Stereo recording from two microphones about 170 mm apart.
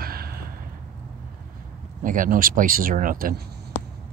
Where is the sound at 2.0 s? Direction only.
50° right (ahead or behind).